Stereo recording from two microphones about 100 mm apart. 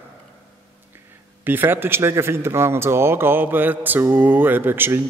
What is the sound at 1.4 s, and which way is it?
A man's voice, 20° right (ahead or behind).